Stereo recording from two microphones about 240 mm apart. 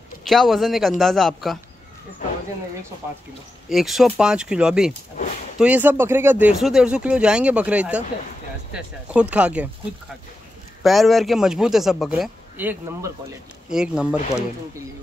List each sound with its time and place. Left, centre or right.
0.2 s speech: centre
3.6 s speech: centre
10.8 s speech: centre